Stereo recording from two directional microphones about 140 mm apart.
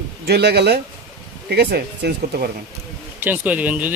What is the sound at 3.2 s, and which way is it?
Speech, 10° right (ahead or behind).